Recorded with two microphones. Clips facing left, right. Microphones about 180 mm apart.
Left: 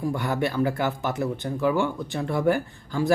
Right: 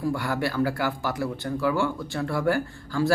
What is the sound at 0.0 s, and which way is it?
Speech, 20° left (ahead or behind).